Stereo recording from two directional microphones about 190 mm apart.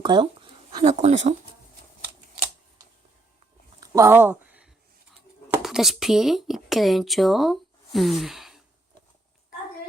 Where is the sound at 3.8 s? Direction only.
15° right (ahead or behind).